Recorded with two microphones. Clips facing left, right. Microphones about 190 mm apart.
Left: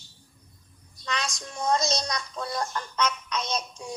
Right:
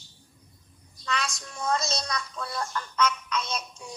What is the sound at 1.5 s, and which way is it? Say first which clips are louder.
Speech: left 3 dB; 35° left (ahead or behind).